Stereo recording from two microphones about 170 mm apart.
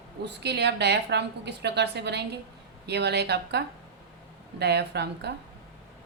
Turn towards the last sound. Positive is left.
turn(degrees=-80)